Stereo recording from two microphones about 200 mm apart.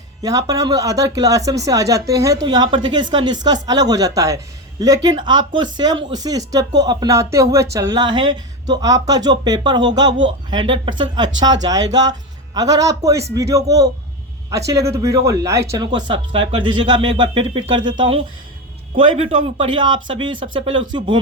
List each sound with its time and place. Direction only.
0.2 s speech: 20° right (ahead or behind)